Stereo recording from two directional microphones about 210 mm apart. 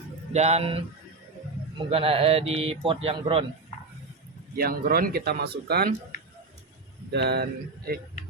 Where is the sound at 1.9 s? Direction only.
25° right (ahead or behind).